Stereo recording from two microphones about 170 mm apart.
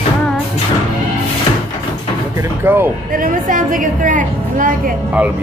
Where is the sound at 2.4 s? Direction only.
10° right (ahead or behind).